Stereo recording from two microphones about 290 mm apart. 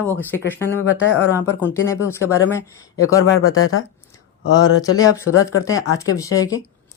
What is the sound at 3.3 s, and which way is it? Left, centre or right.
Speech, left.